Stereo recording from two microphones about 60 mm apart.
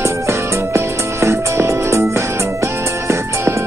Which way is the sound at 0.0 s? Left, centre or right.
Right.